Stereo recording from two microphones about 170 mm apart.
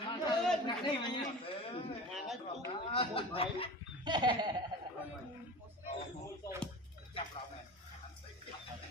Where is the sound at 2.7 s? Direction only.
35° left (ahead or behind).